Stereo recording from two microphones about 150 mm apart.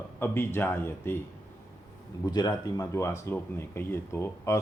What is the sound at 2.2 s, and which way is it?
Speech, 25° left (ahead or behind).